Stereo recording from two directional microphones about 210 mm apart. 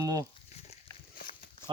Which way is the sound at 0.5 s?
30° left (ahead or behind).